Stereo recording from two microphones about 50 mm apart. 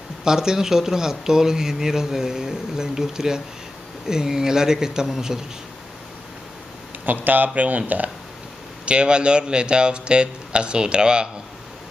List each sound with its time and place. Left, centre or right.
0.2 s speech: centre
7.1 s speech: right
8.8 s speech: right